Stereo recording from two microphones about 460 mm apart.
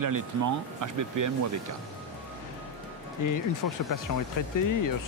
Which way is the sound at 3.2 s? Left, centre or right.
Left.